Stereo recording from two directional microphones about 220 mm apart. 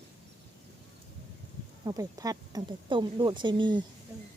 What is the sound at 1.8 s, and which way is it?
Speech, 15° right (ahead or behind).